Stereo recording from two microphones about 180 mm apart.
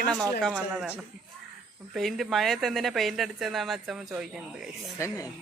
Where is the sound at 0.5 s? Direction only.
5° right (ahead or behind).